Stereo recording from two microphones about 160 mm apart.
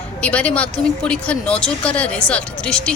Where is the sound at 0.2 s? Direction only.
10° left (ahead or behind).